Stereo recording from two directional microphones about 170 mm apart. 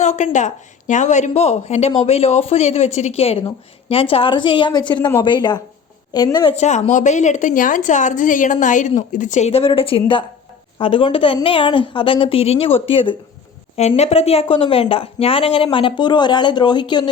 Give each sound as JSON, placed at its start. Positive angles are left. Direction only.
{"t": 0.0, "sound": "a woman's voice", "side_deg": 45}
{"t": 6.6, "sound": "a woman's voice", "side_deg": 40}